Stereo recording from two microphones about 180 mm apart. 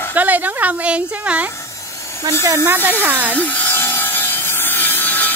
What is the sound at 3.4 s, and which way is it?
Wood, 10° left (ahead or behind).